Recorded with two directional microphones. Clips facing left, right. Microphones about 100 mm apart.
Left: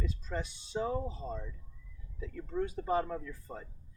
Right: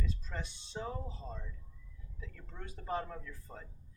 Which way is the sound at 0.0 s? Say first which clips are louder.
Left 5 dB; 10° left (ahead or behind).